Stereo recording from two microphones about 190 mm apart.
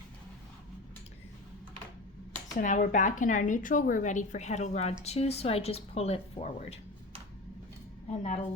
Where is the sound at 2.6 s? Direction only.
45° left (ahead or behind).